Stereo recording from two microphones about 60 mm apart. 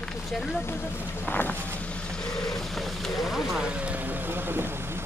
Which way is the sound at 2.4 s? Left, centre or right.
Centre.